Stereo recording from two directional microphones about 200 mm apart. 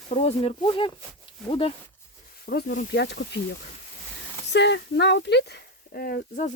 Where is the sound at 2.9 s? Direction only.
60° left (ahead or behind).